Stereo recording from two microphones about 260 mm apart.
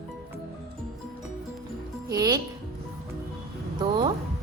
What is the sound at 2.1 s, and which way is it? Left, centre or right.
Speech, centre.